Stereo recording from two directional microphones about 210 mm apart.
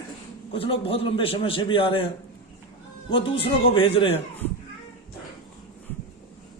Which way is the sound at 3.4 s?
25° left (ahead or behind).